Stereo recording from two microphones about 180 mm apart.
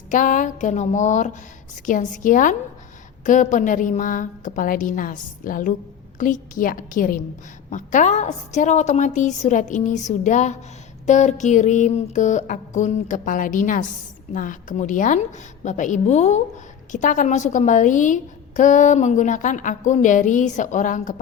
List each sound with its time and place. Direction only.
0.1 s a woman's voice: 45° left (ahead or behind)